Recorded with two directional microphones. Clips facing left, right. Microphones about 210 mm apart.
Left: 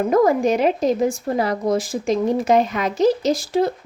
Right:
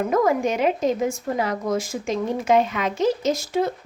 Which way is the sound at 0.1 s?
35° left (ahead or behind).